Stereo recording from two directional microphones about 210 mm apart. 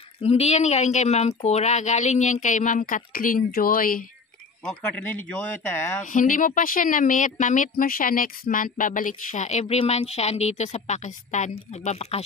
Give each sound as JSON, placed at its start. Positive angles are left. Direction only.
{"t": 0.2, "sound": "speech", "side_deg": 30}
{"t": 4.6, "sound": "speech", "side_deg": 5}
{"t": 6.0, "sound": "speech", "side_deg": 40}